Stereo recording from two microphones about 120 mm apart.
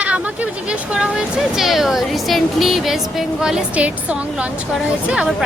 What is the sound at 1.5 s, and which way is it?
Speech, centre (ahead or behind).